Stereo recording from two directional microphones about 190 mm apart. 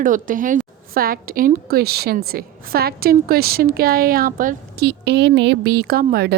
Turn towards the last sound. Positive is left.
turn(degrees=-50)  # may be behind; listen again after turning